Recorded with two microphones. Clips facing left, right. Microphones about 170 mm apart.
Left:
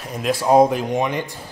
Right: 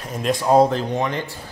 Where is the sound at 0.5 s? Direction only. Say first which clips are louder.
Left 1 dB; 15° left (ahead or behind).